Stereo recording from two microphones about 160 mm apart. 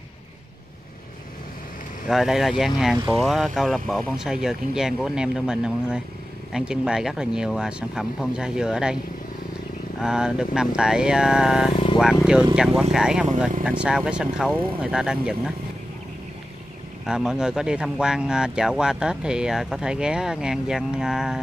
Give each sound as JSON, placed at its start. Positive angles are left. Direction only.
{"t": 2.0, "sound": "speech", "side_deg": 0}
{"t": 9.9, "sound": "speech", "side_deg": -5}
{"t": 11.7, "sound": "speech", "side_deg": 30}
{"t": 12.5, "sound": "speech", "side_deg": -5}
{"t": 17.0, "sound": "speech", "side_deg": -5}